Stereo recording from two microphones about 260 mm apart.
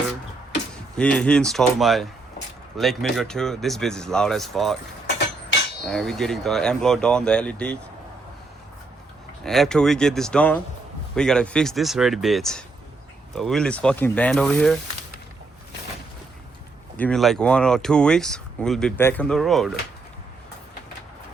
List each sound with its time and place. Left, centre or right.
0.7 s speech: centre
5.0 s a sound: left
5.9 s speech: centre
9.4 s speech: centre
17.0 s speech: centre